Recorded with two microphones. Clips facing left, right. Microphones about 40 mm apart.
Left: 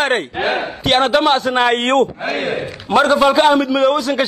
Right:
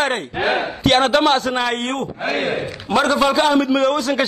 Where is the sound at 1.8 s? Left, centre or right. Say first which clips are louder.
Left 9 dB; left.